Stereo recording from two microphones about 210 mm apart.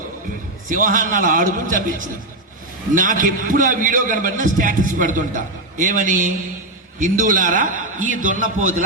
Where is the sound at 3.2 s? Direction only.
40° right (ahead or behind).